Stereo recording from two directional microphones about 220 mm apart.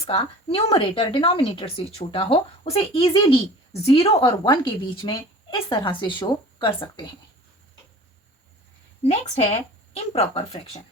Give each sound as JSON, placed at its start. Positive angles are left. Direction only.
{"t": 0.0, "sound": "a woman's voice", "side_deg": 25}
{"t": 9.0, "sound": "a woman's voice", "side_deg": 30}